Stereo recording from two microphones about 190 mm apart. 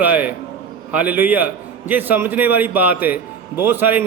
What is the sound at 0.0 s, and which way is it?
A man's voice, 10° right (ahead or behind).